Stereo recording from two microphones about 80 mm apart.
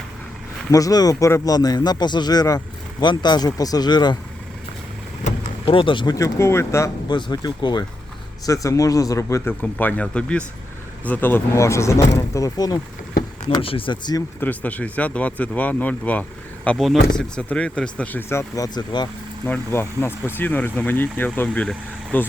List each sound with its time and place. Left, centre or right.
0.7 s a man's voice: left
3.0 s speech: left
5.6 s speech: left
6.1 s speech: left
7.1 s speech: left
8.4 s a man's voice: left
9.5 s speech: left
11.5 s speech: left
13.7 s speech: left
14.4 s speech: left
16.7 s speech: centre
17.2 s speech: centre; by 18.7 s left
18.7 s speech: left
19.5 s speech: left